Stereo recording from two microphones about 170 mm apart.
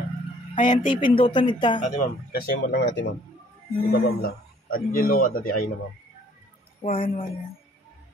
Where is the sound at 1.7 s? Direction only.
50° left (ahead or behind).